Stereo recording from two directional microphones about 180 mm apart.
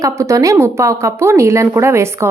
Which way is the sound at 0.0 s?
15° right (ahead or behind).